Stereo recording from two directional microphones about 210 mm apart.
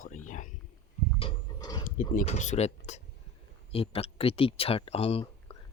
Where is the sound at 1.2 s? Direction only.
20° left (ahead or behind).